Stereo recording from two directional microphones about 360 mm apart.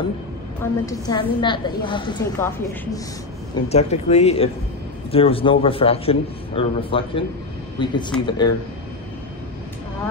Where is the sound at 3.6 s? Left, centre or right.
Centre.